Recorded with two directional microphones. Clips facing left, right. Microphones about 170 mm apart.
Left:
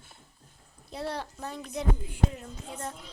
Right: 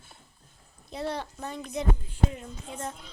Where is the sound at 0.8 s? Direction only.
5° left (ahead or behind).